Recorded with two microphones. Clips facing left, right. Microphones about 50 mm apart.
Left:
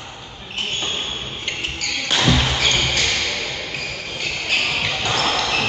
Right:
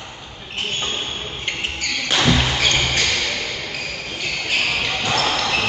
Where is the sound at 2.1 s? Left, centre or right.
Centre.